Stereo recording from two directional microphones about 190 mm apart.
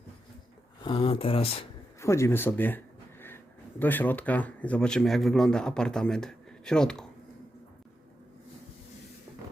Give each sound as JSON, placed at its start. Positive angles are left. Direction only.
{"t": 0.9, "sound": "speech", "side_deg": 30}
{"t": 2.0, "sound": "speech", "side_deg": 15}